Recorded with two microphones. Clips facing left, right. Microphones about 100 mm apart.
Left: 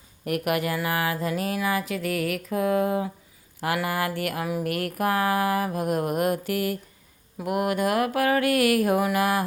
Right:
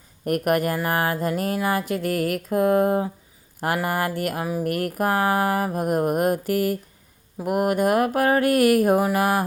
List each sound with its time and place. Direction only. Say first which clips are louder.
0.3 s speech: right 4 dB; 45° right (ahead or behind)
3.6 s mantra: right 2 dB; 40° right (ahead or behind)
7.4 s speech: right 4 dB; 45° right (ahead or behind)